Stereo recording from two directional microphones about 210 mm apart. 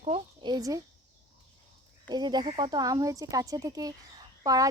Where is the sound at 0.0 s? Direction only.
25° right (ahead or behind).